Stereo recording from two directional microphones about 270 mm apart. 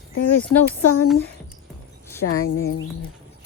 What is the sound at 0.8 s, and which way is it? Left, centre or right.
Speech, left.